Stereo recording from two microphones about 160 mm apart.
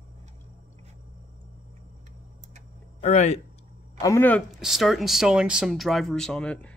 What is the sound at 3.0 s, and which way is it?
Speech, 45° left (ahead or behind).